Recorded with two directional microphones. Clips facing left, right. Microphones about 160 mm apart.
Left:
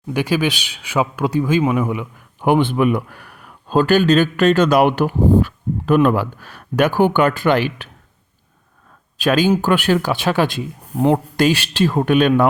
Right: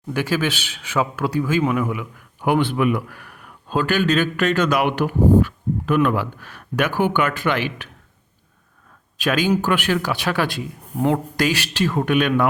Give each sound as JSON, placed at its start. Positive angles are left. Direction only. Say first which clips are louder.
{"t": 0.1, "sound": "speech", "louder": "left 3 dB", "side_deg": 15}
{"t": 9.1, "sound": "speech", "louder": "left 4 dB", "side_deg": 35}